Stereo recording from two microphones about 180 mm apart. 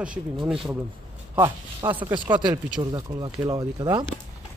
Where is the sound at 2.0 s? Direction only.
25° right (ahead or behind).